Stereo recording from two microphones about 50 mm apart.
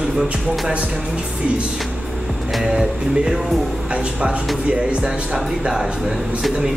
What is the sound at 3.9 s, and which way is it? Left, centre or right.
Music, right.